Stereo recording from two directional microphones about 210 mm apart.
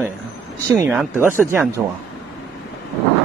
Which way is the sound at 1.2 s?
10° right (ahead or behind).